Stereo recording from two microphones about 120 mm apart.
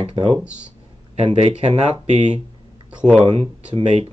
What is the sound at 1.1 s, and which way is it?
Speech, 65° right (ahead or behind).